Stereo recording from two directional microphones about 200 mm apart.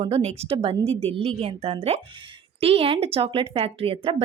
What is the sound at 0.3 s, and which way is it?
Speech, 30° right (ahead or behind).